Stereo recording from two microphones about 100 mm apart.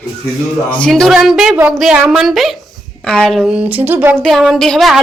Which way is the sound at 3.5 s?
15° right (ahead or behind).